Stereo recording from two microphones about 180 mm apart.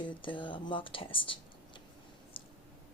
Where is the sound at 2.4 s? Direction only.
30° left (ahead or behind).